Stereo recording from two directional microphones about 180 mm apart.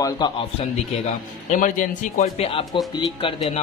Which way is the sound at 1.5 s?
40° left (ahead or behind).